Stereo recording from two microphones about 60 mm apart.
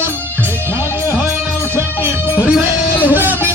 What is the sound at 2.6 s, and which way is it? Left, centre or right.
Music, right.